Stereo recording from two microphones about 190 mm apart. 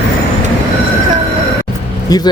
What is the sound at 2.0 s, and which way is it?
Speech, 20° left (ahead or behind).